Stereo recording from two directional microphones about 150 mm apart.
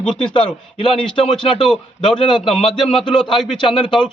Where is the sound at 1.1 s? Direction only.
35° left (ahead or behind).